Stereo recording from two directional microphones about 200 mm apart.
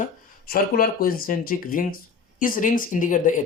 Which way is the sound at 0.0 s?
45° left (ahead or behind).